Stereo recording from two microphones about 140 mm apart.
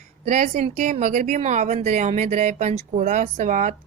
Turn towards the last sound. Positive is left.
turn(degrees=-60)  # may be behind; listen again after turning